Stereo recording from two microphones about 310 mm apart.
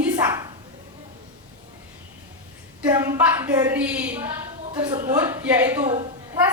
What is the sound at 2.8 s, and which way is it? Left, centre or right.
A woman's voice, centre.